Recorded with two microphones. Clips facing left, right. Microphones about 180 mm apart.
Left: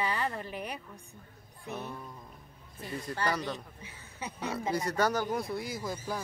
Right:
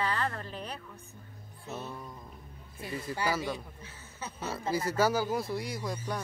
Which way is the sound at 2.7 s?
5° right (ahead or behind).